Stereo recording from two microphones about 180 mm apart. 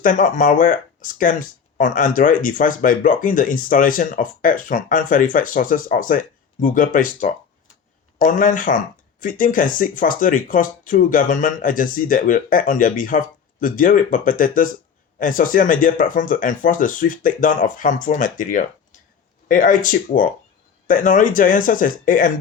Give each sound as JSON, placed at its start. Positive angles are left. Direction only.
{"t": 0.0, "sound": "speech", "side_deg": 45}